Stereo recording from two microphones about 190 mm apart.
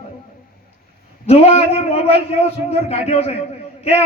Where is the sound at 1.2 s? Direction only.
30° left (ahead or behind).